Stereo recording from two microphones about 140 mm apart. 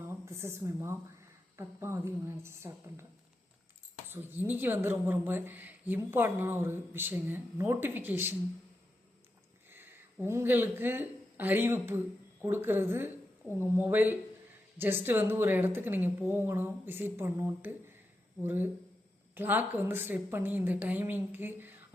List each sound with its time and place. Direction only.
0.0 s speech: 20° right (ahead or behind)
4.1 s speech: 15° right (ahead or behind)
9.6 s speech: 15° right (ahead or behind)